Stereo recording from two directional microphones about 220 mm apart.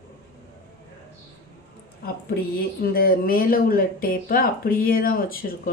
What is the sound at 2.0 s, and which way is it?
Speech, 45° left (ahead or behind).